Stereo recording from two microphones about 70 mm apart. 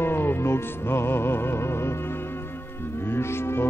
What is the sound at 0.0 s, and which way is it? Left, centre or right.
Music, left.